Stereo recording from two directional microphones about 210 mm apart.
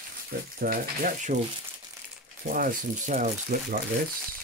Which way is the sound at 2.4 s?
40° right (ahead or behind).